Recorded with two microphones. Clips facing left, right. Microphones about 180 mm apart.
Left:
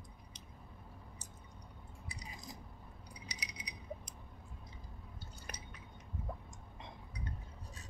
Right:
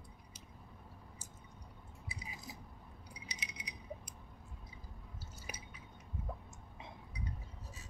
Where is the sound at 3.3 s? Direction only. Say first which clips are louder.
Even; 25° right (ahead or behind).